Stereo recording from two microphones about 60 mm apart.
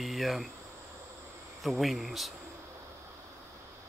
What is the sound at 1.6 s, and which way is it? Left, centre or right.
Speech, centre.